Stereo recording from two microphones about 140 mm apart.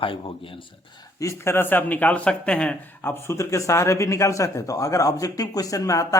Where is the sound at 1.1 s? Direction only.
20° left (ahead or behind).